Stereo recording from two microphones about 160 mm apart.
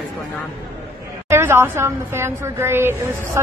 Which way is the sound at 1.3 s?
15° right (ahead or behind).